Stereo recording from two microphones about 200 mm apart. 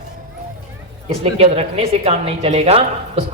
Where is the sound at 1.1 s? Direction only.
30° right (ahead or behind).